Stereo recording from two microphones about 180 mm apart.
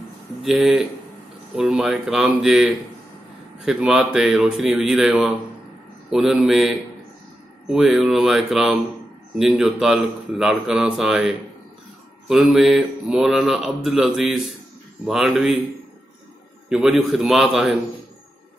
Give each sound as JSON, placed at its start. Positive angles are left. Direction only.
{"t": 0.4, "sound": "speech", "side_deg": 0}
{"t": 16.6, "sound": "speech", "side_deg": 0}